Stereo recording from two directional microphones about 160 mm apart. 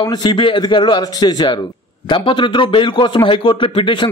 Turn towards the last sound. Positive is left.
turn(degrees=30)  # may be behind; listen again after turning